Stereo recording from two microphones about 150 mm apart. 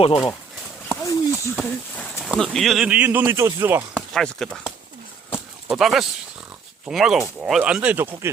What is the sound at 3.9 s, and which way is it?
Speech, 5° left (ahead or behind).